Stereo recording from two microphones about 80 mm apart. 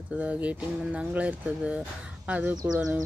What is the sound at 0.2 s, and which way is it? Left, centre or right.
Speech, centre.